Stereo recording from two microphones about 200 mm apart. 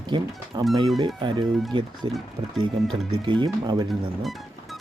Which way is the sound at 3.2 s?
20° right (ahead or behind).